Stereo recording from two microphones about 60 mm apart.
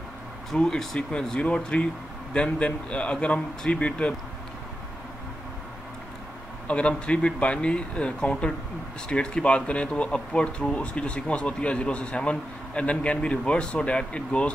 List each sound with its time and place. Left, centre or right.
0.6 s speech: centre
6.7 s speech: centre